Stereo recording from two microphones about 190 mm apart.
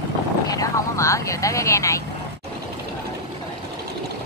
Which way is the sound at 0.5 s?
15° left (ahead or behind).